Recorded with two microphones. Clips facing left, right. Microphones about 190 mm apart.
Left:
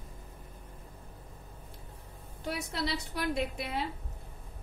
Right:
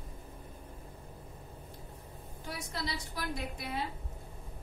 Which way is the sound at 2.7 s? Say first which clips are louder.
Left 4 dB; 70° left (ahead or behind).